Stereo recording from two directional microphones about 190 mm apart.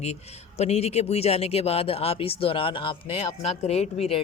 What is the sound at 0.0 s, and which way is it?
A man's voice, 35° left (ahead or behind).